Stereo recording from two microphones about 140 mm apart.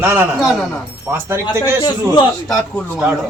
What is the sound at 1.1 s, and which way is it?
Speech, 15° right (ahead or behind).